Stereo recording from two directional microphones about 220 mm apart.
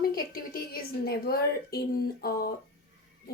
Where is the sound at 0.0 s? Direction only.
40° left (ahead or behind).